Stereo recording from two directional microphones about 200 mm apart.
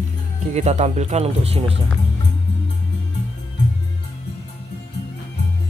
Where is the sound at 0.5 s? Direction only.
35° right (ahead or behind).